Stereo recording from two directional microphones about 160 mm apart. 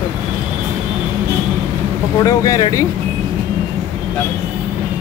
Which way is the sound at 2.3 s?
20° left (ahead or behind).